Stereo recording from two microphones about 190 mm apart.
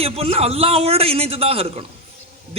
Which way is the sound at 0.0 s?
30° right (ahead or behind).